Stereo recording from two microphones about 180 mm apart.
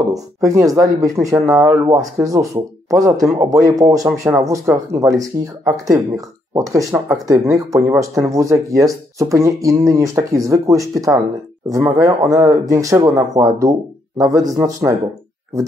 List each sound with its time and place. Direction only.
0.1 s speech: 20° right (ahead or behind)